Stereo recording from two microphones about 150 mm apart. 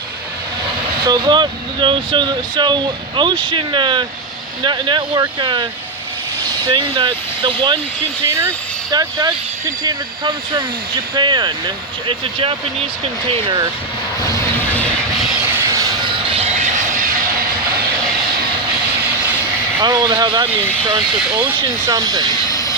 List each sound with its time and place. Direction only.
1.0 s speech: 30° right (ahead or behind)
6.7 s speech: 30° right (ahead or behind)
8.9 s speech: 25° right (ahead or behind)
15.7 s train: 25° right (ahead or behind)
16.7 s vehicle: 60° right (ahead or behind)
19.8 s speech: 30° right (ahead or behind)
21.8 s speech: 25° right (ahead or behind)
22.4 s vehicle: 25° left (ahead or behind)